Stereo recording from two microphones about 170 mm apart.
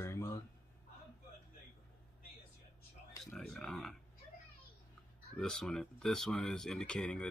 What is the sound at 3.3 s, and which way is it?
Speech, 5° left (ahead or behind).